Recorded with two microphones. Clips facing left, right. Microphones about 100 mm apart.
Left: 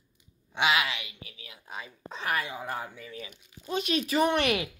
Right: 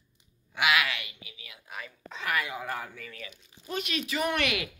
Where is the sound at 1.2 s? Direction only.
35° left (ahead or behind).